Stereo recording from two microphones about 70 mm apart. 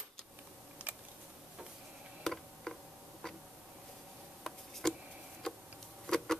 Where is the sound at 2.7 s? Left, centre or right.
Centre.